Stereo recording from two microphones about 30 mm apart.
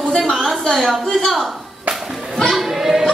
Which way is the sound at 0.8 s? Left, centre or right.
Centre.